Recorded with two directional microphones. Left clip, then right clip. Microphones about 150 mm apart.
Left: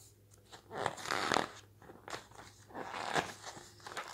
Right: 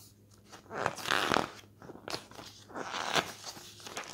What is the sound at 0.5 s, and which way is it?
Crunch, 5° left (ahead or behind).